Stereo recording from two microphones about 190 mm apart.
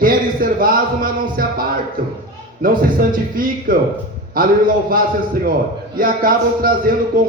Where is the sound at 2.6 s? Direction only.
50° right (ahead or behind).